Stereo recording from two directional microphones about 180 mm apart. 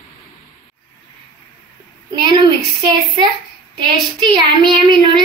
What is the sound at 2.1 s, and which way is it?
A woman's voice, 25° right (ahead or behind).